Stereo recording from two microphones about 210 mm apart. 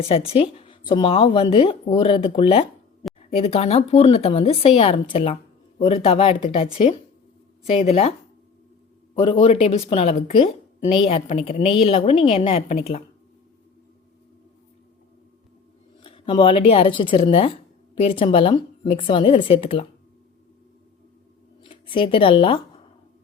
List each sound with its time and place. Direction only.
0.1 s speech: 25° left (ahead or behind)
7.7 s speech: 30° left (ahead or behind)
9.1 s speech: 25° left (ahead or behind)
16.0 s a woman's voice: 25° left (ahead or behind)
21.8 s speech: 25° left (ahead or behind)